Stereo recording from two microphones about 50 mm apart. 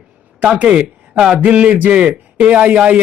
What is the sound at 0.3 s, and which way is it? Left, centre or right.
Speech, right.